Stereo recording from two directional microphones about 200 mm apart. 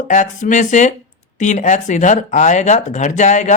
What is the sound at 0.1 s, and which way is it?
Speech, 40° left (ahead or behind).